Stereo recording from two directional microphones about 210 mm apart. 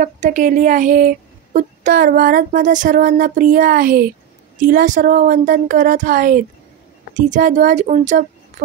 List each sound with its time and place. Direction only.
0.0 s speech: 35° right (ahead or behind)